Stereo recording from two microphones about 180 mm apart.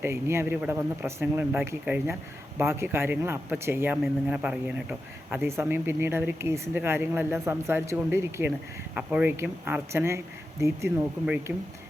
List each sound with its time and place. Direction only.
0.0 s a man's voice: 15° right (ahead or behind)